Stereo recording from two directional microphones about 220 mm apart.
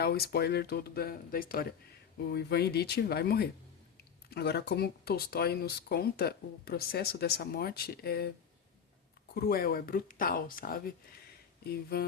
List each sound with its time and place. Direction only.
0.0 s speech: 45° left (ahead or behind)
9.3 s speech: 45° left (ahead or behind)